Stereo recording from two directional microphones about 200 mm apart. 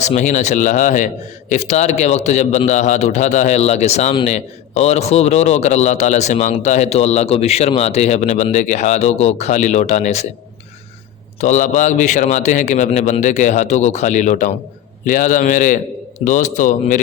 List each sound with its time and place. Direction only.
0.0 s a man's voice: 35° left (ahead or behind)
11.3 s a man's voice: 40° left (ahead or behind)